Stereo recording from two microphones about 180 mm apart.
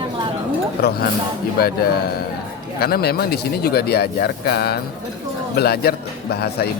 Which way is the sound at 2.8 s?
60° left (ahead or behind).